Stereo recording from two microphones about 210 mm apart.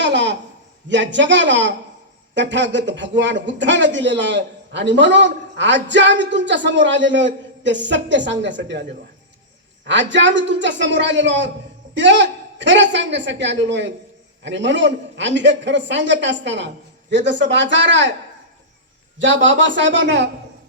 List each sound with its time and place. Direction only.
0.0 s a sound: 55° right (ahead or behind)
0.9 s speech: 55° right (ahead or behind)
9.8 s speech: 60° right (ahead or behind)
19.2 s speech: 60° right (ahead or behind)